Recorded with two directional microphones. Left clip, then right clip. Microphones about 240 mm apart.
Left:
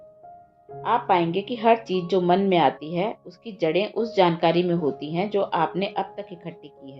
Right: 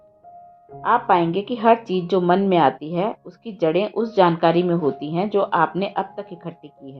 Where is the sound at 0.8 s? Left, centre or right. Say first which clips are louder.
Right 4 dB; right.